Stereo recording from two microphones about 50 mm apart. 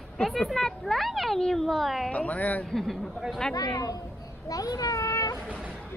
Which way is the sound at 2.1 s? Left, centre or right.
Left.